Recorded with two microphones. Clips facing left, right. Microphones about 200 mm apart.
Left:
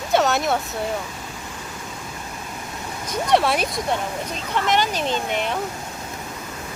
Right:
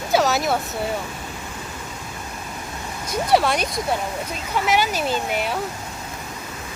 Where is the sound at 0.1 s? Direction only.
Centre (ahead or behind).